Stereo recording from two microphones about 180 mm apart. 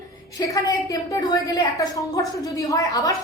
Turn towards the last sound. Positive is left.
turn(degrees=20)  # may be behind; listen again after turning